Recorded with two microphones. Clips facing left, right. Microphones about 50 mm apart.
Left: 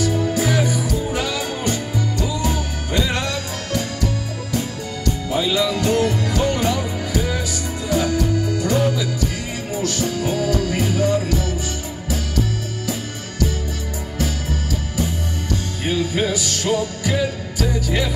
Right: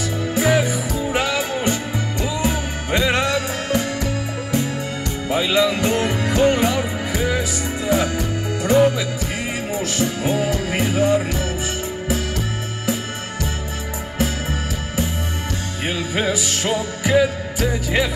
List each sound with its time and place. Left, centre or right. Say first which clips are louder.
0.0 s music: left 1 dB; right
14.1 s music: right 2 dB; right